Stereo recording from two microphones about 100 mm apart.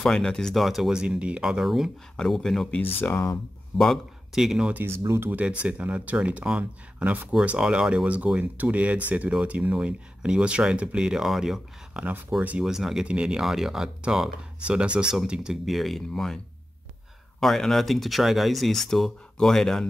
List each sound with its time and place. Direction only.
0.0 s speech: 5° left (ahead or behind)
3.0 s speech: 25° left (ahead or behind)
3.7 s speech: centre (ahead or behind)
4.7 s speech: 25° right (ahead or behind)
5.3 s speech: 15° right (ahead or behind); by 16.3 s 5° left (ahead or behind)
17.4 s speech: 5° left (ahead or behind)